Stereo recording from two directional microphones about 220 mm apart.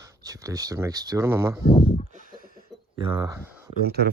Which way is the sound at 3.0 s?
20° right (ahead or behind).